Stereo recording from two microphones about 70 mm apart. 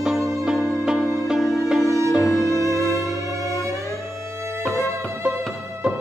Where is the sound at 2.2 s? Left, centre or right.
Left.